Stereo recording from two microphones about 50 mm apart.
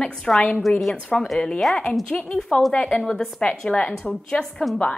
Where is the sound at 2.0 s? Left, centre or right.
Left.